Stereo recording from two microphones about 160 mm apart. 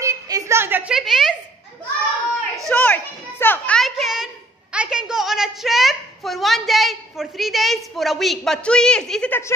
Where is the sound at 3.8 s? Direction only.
Centre (ahead or behind).